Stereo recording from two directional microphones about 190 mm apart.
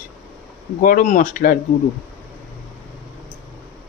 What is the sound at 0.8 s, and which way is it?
Speech, 45° left (ahead or behind).